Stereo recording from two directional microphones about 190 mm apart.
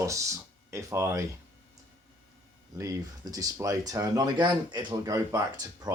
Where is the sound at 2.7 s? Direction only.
15° right (ahead or behind).